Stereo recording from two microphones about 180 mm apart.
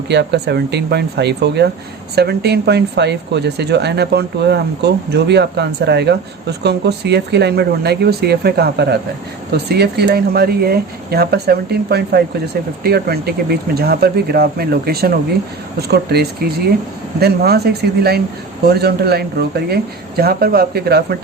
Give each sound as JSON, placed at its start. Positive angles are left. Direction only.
{"t": 0.1, "sound": "speech", "side_deg": -70}
{"t": 18.7, "sound": "speech", "side_deg": -60}